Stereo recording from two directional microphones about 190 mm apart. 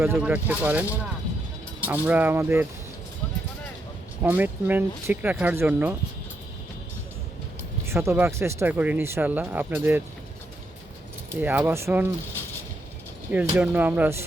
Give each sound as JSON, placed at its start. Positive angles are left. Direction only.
{"t": 0.0, "sound": "speech", "side_deg": -10}
{"t": 4.2, "sound": "speech", "side_deg": -10}
{"t": 7.9, "sound": "speech", "side_deg": -15}
{"t": 11.3, "sound": "speech", "side_deg": -10}
{"t": 13.6, "sound": "speech", "side_deg": -10}